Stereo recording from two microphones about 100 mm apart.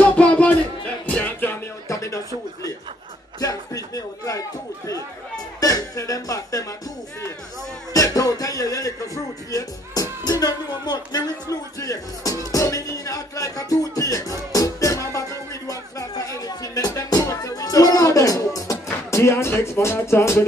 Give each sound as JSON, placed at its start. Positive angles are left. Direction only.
{"t": 0.0, "sound": "music", "side_deg": 10}
{"t": 3.3, "sound": "a sound", "side_deg": 35}
{"t": 5.6, "sound": "music", "side_deg": 35}
{"t": 7.9, "sound": "music", "side_deg": 35}